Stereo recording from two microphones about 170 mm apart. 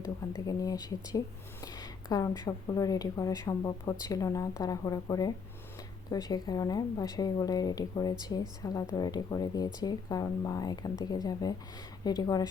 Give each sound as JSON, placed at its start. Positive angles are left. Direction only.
{"t": 0.0, "sound": "a woman's voice", "side_deg": 20}